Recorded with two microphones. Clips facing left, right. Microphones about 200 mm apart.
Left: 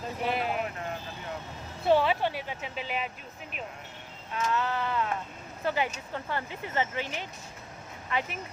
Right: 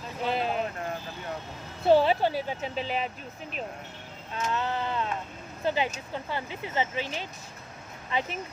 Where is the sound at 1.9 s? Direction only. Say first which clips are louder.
Right 3 dB; 35° right (ahead or behind).